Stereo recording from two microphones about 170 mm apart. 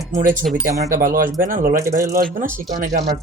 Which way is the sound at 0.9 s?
55° right (ahead or behind).